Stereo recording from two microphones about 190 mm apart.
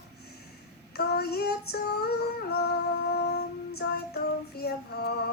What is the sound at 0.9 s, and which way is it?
Female singing, 55° left (ahead or behind).